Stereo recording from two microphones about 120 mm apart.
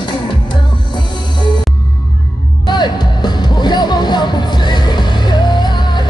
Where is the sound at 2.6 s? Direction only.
35° left (ahead or behind).